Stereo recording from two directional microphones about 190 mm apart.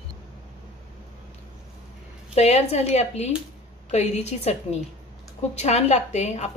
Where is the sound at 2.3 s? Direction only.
35° left (ahead or behind).